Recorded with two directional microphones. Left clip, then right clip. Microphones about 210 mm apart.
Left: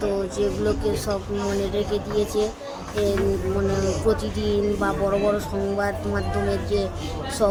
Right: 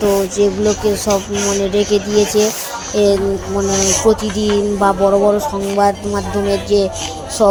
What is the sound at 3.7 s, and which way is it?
Speech, 40° right (ahead or behind).